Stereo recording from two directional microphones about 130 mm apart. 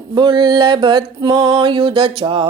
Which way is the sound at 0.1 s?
40° right (ahead or behind).